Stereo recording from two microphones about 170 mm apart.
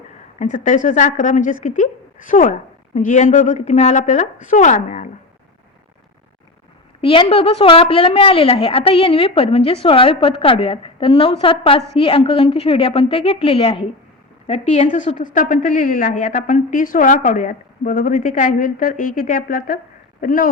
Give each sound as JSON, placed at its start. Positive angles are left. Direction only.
{"t": 0.3, "sound": "a woman's voice", "side_deg": 50}
{"t": 7.0, "sound": "a woman's voice", "side_deg": 30}